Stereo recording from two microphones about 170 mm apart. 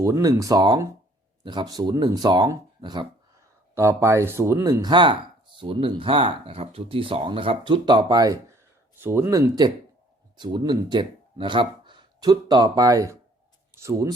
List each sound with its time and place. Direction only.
0.0 s speech: 20° right (ahead or behind)